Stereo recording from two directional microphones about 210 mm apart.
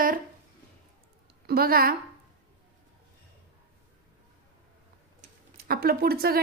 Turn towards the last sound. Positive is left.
turn(degrees=-45)  # may be behind; listen again after turning